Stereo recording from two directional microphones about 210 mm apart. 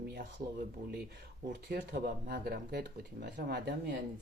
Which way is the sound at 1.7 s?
50° right (ahead or behind).